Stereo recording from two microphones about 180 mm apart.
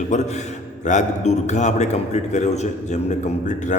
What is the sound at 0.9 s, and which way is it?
A man's voice, 40° left (ahead or behind).